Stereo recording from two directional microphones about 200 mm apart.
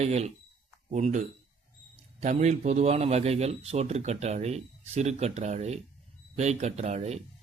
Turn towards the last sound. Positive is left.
turn(degrees=-35)  # may be behind; listen again after turning